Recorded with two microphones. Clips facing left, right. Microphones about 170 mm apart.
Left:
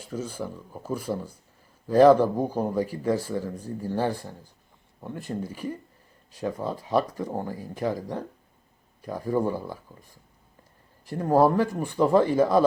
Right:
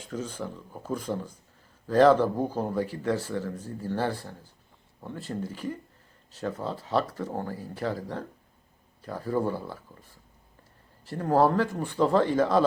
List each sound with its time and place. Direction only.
0.0 s speech: 10° left (ahead or behind)